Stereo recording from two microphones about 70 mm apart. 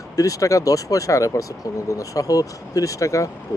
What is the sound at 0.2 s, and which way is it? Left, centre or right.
Speech, left.